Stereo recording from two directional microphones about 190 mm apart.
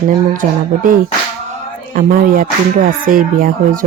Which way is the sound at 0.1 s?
45° right (ahead or behind).